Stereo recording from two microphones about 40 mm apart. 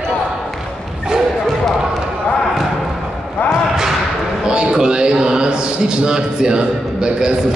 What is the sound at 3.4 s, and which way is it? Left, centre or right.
Basketball bounce, left.